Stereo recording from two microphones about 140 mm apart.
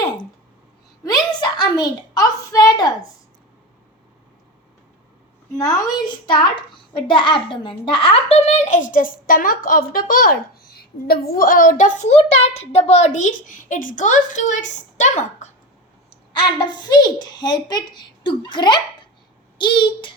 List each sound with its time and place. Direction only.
1.3 s a child's voice: 30° left (ahead or behind)
5.5 s a child's voice: 30° left (ahead or behind); by 15.5 s 55° left (ahead or behind)
16.4 s a child's voice: 35° left (ahead or behind)